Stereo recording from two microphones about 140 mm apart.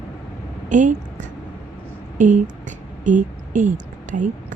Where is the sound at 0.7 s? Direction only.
65° right (ahead or behind).